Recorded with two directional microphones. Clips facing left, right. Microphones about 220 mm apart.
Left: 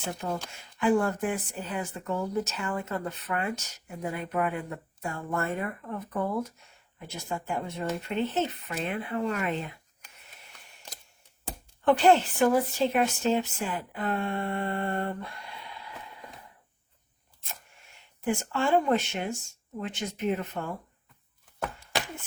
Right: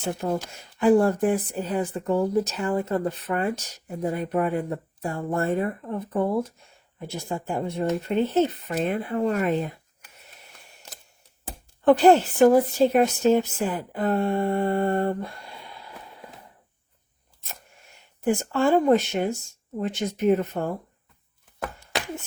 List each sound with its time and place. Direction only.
0.2 s speech: 45° right (ahead or behind)
11.9 s speech: 40° right (ahead or behind)
18.2 s speech: 40° right (ahead or behind)